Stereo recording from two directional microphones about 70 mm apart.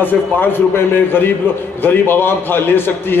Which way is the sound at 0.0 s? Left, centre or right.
Left.